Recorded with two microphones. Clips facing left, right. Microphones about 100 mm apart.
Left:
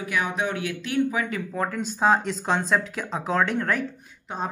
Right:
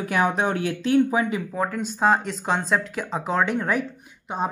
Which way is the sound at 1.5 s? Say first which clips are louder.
Right 1 dB; 5° right (ahead or behind).